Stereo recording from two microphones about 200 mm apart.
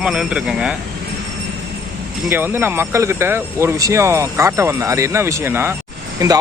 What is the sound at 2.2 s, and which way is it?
Speech, 10° right (ahead or behind).